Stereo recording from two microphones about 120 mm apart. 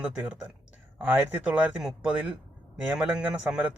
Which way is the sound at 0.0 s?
10° right (ahead or behind).